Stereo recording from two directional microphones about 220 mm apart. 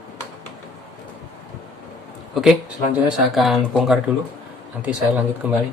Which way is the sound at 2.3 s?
Centre (ahead or behind).